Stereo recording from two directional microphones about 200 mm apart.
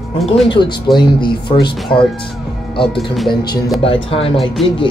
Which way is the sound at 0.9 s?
25° left (ahead or behind).